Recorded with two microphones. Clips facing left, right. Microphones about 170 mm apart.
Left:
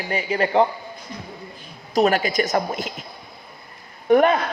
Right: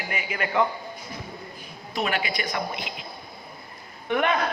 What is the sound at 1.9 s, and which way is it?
Speech, 40° left (ahead or behind).